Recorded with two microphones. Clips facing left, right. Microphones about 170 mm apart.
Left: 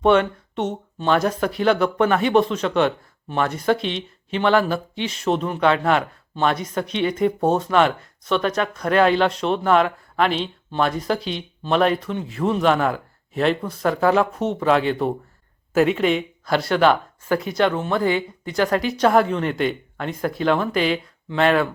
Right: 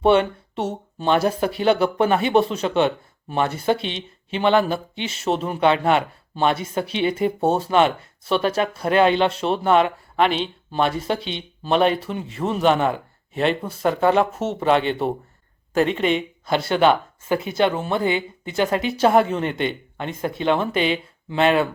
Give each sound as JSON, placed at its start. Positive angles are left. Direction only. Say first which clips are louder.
{"t": 0.0, "sound": "speech", "louder": "even", "side_deg": -30}
{"t": 0.5, "sound": "speech", "louder": "left 1 dB", "side_deg": -10}
{"t": 1.0, "sound": "speech", "louder": "even", "side_deg": -30}
{"t": 3.9, "sound": "speech", "louder": "left 2 dB", "side_deg": 0}
{"t": 6.5, "sound": "speech", "louder": "even", "side_deg": -25}
{"t": 9.7, "sound": "speech", "louder": "right 1 dB", "side_deg": 0}
{"t": 16.9, "sound": "speech", "louder": "even", "side_deg": -25}
{"t": 17.6, "sound": "speech", "louder": "even", "side_deg": -5}
{"t": 17.8, "sound": "speech", "louder": "left 1 dB", "side_deg": -25}
{"t": 18.9, "sound": "speech", "louder": "right 1 dB", "side_deg": -5}
{"t": 20.4, "sound": "speech", "louder": "even", "side_deg": -25}